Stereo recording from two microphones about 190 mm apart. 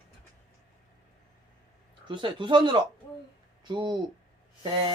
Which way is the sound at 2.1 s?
25° right (ahead or behind).